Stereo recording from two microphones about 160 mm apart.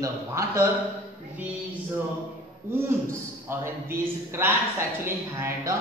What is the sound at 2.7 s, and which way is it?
A man's voice, 15° right (ahead or behind).